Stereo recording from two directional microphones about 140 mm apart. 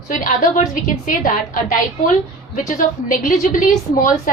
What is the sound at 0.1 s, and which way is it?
A woman's voice, 65° left (ahead or behind).